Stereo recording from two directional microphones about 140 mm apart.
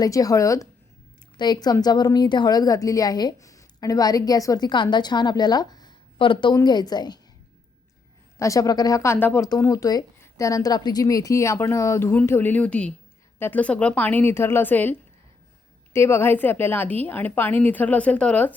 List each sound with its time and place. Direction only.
0.0 s a woman's voice: 25° left (ahead or behind)
8.4 s a woman's voice: 25° left (ahead or behind); by 18.5 s 10° left (ahead or behind)